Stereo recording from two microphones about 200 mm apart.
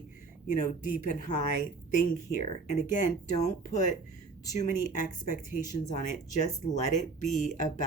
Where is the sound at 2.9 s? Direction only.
40° left (ahead or behind).